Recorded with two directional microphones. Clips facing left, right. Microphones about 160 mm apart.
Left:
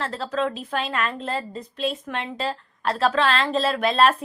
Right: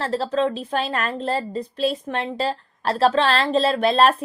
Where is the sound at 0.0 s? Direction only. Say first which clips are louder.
Right 4 dB; 35° right (ahead or behind).